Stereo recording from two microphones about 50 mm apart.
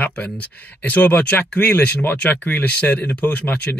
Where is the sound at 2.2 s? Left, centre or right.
Left.